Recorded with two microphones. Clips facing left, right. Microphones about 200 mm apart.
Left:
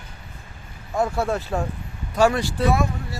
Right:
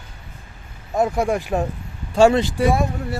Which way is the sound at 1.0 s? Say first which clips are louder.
Right 3 dB; 15° right (ahead or behind).